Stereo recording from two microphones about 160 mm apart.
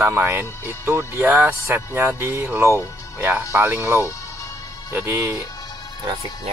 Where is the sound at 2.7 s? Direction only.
20° left (ahead or behind).